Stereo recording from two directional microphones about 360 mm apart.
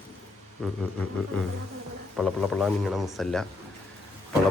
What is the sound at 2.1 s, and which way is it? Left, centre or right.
A man's voice, centre.